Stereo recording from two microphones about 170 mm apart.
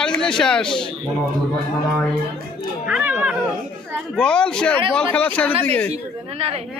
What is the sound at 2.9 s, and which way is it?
Speech, 10° right (ahead or behind).